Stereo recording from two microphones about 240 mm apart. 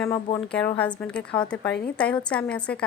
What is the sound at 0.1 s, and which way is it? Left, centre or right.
A woman's voice, centre.